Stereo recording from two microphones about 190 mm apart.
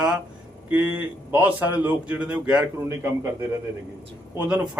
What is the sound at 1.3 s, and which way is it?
A man's voice, 10° right (ahead or behind).